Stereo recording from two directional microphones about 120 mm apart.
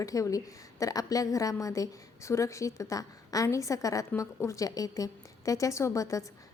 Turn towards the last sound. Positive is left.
turn(degrees=25)  # may be behind; listen again after turning